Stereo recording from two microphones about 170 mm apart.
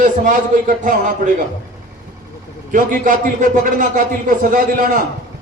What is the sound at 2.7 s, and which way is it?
A man's voice, 50° right (ahead or behind).